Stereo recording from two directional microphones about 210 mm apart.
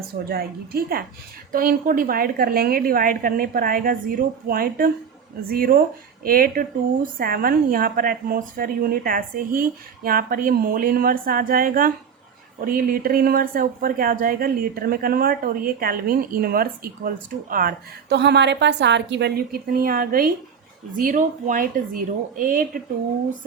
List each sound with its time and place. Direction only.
0.3 s speech: 45° right (ahead or behind)